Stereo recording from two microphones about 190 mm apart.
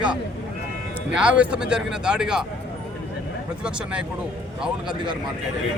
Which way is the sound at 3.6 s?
5° right (ahead or behind).